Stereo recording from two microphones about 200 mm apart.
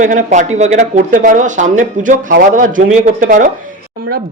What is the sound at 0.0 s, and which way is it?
Speech, 40° right (ahead or behind).